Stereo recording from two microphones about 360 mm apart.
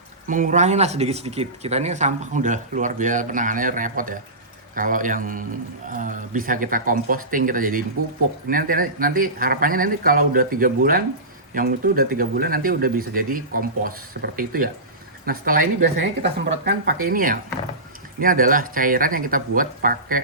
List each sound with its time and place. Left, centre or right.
0.3 s speech: right